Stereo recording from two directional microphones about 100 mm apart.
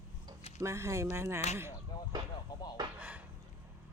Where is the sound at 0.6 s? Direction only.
30° right (ahead or behind).